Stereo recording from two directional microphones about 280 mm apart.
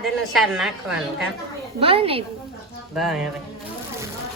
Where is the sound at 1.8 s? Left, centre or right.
Centre.